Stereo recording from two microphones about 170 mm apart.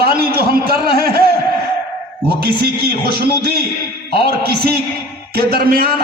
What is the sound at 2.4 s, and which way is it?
A man's voice, 65° right (ahead or behind).